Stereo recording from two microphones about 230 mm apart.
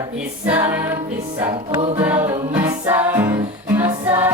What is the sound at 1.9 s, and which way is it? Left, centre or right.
Music, centre.